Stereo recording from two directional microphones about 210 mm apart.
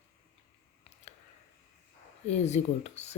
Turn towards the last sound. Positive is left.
turn(degrees=30)  # may be behind; listen again after turning